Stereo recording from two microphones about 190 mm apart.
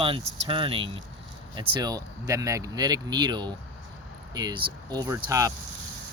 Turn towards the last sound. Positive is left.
turn(degrees=-15)  # may be behind; listen again after turning